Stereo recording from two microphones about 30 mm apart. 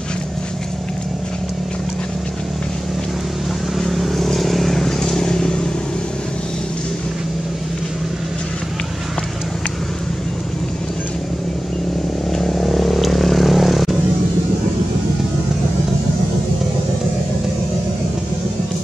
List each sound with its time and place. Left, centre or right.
3.7 s vehicle: centre; by 5.7 s left
12.3 s vehicle: centre